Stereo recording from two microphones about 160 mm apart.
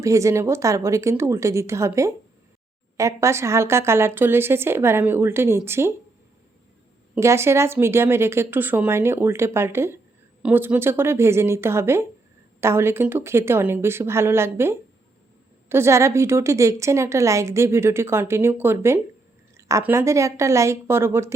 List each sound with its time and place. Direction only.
0.0 s a woman's voice: 20° right (ahead or behind)
7.2 s a woman's voice: 15° right (ahead or behind)